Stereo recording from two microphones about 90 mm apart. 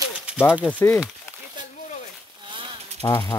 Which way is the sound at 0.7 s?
20° left (ahead or behind).